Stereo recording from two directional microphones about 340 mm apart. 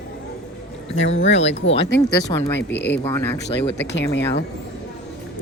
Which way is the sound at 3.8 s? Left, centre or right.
Left.